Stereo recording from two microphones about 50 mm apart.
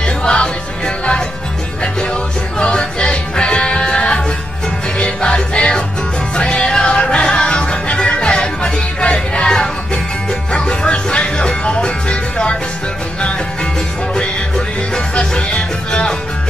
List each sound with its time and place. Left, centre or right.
0.0 s music: centre
2.6 s music: centre
15.1 s music: centre